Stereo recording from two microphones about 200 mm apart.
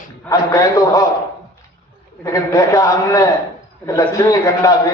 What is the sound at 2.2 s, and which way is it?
A man's voice, 15° left (ahead or behind).